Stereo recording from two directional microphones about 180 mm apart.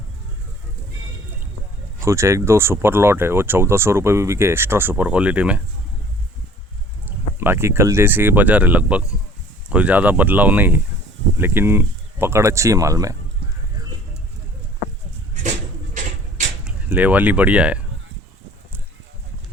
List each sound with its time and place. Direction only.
2.0 s speech: 15° right (ahead or behind)
7.0 s speech: 10° right (ahead or behind)
15.4 s a sound: 45° right (ahead or behind)
16.6 s speech: 10° right (ahead or behind)